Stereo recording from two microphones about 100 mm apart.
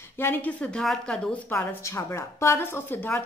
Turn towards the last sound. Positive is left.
turn(degrees=20)  # may be behind; listen again after turning